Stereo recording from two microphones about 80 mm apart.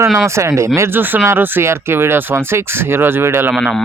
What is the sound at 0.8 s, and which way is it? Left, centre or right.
Speech, right.